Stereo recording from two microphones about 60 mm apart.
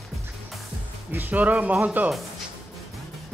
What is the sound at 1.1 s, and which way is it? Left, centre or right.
Speech, right.